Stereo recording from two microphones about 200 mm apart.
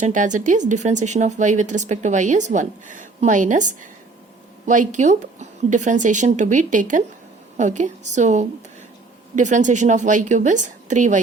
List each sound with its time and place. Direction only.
0.0 s speech: 40° right (ahead or behind)